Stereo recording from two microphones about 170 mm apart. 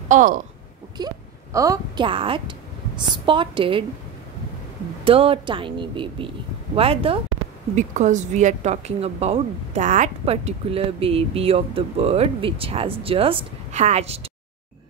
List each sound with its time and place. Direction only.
0.1 s speech: 50° right (ahead or behind)
0.9 s a sound: 20° right (ahead or behind)
2.0 s a woman's voice: 30° right (ahead or behind)
5.0 s a woman's voice: 30° right (ahead or behind)
7.7 s a woman's voice: 45° right (ahead or behind)